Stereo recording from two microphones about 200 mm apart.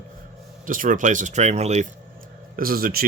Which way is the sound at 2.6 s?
45° right (ahead or behind).